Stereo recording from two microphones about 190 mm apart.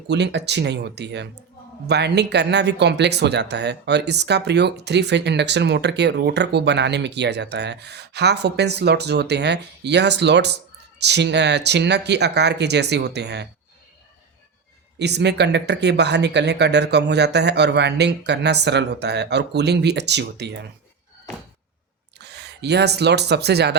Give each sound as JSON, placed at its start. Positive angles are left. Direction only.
{"t": 0.1, "sound": "speech", "side_deg": -65}
{"t": 14.9, "sound": "speech", "side_deg": -65}
{"t": 22.2, "sound": "speech", "side_deg": -60}